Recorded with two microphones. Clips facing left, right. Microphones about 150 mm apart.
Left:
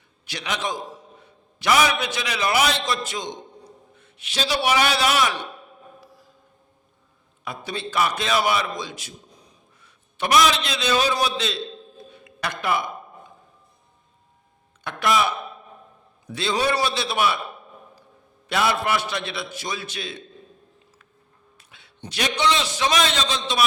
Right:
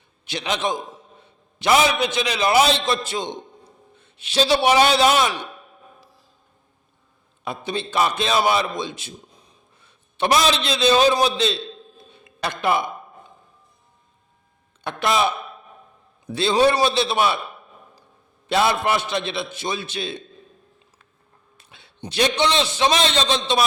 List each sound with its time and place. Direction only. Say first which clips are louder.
0.3 s a man's voice: right 4 dB; 25° right (ahead or behind)
7.4 s a man's voice: right 4 dB; 25° right (ahead or behind)
12.1 s a sound: right 3 dB; 25° right (ahead or behind)
14.8 s a man's voice: right 1 dB; 25° right (ahead or behind)
16.3 s a man's voice: right 5 dB; 30° right (ahead or behind)
18.4 s a man's voice: right 3 dB; 25° right (ahead or behind)
21.6 s a sound: right 2 dB; 30° right (ahead or behind)
22.1 s a man's voice: right 3 dB; 30° right (ahead or behind)